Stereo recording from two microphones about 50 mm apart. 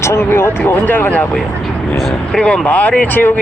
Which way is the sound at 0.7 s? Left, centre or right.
Left.